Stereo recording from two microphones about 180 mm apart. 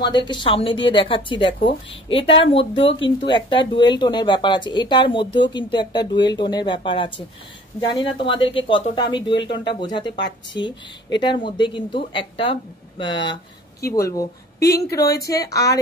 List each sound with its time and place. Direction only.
0.0 s speech: 25° left (ahead or behind)
15.0 s speech: 60° left (ahead or behind)
15.2 s speech: 20° left (ahead or behind)